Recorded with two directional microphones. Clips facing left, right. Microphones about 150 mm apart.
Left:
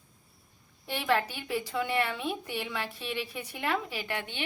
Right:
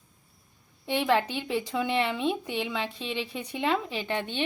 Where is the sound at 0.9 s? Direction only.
20° right (ahead or behind).